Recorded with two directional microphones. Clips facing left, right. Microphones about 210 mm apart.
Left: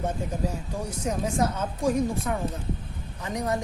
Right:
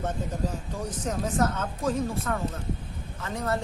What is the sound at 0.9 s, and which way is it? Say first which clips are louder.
A woman's voice: left 1 dB; 10° left (ahead or behind).